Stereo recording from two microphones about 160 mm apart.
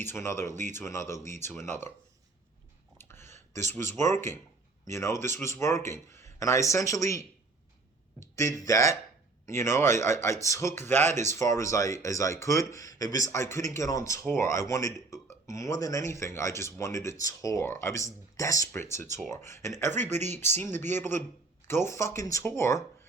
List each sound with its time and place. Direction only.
0.0 s a man's voice: 15° left (ahead or behind)
3.0 s a sound: 15° left (ahead or behind)
4.1 s a man's voice: 15° left (ahead or behind)
8.5 s a man's voice: 20° left (ahead or behind)
11.0 s speech: 45° right (ahead or behind)
11.3 s a man's voice: 20° left (ahead or behind)
20.0 s speech: 45° right (ahead or behind)
20.6 s a man's voice: 15° left (ahead or behind)